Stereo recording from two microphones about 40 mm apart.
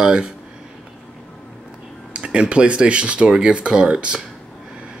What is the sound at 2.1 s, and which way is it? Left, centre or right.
Speech, right.